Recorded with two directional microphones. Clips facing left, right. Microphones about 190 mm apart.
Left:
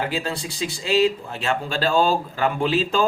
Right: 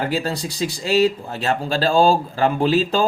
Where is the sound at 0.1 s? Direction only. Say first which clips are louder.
Right 4 dB; 40° right (ahead or behind).